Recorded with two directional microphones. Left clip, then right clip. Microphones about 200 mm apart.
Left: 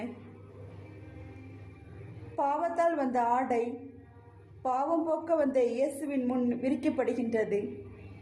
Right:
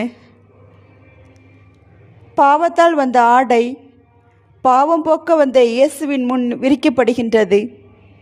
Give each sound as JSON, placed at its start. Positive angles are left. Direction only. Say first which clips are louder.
{"t": 2.3, "sound": "a woman's voice", "louder": "right 18 dB", "side_deg": -45}